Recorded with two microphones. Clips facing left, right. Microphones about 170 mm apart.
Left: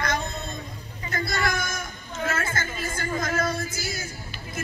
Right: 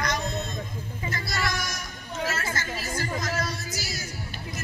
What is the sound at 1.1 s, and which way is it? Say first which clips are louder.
Music: left 4 dB; 55° left (ahead or behind).